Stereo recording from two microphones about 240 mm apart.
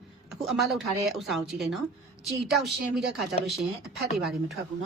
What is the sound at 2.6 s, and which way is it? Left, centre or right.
Speech, right.